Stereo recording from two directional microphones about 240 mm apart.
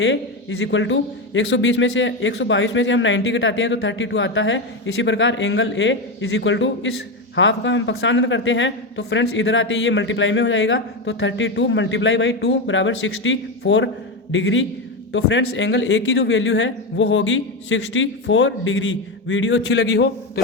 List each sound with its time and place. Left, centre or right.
0.6 s speech: left